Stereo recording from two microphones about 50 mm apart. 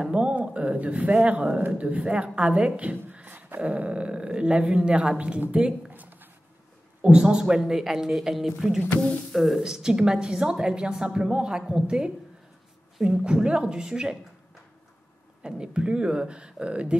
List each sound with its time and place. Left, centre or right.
0.0 s a sound: right
1.8 s speech: right
3.1 s speech: right
5.9 s a sound: right
7.0 s a woman's voice: centre
9.6 s a woman's voice: centre
15.4 s speech: centre